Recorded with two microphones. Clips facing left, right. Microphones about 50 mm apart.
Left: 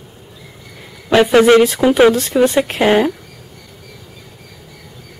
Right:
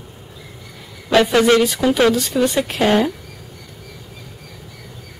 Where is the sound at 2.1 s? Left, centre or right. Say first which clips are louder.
Left 3 dB; left.